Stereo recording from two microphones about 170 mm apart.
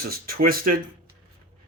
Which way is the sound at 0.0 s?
60° right (ahead or behind).